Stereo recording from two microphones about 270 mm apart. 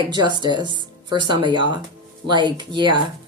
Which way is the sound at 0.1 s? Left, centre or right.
Centre.